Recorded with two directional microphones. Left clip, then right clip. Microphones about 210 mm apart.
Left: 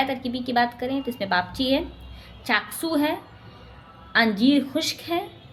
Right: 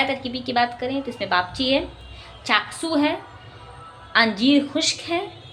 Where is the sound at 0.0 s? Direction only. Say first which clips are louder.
Right 2 dB; 15° left (ahead or behind).